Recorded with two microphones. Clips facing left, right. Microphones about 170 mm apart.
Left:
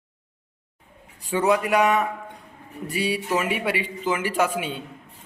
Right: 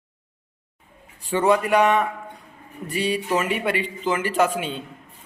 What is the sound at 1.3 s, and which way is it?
A man's voice, 10° left (ahead or behind).